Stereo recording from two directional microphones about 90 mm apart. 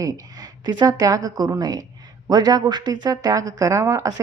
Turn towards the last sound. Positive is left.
turn(degrees=-35)  # may be behind; listen again after turning